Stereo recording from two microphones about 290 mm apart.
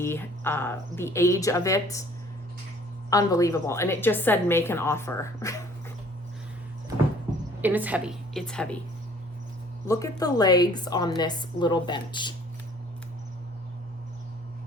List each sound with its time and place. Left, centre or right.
0.0 s a woman's voice: centre
3.1 s a woman's voice: centre
7.6 s a woman's voice: centre
9.8 s a woman's voice: centre